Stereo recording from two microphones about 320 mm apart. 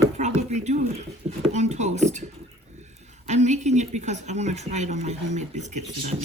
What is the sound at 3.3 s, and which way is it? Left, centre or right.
A woman's voice, right.